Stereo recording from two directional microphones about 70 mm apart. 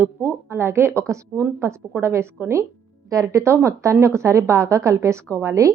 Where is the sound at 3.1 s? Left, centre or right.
Right.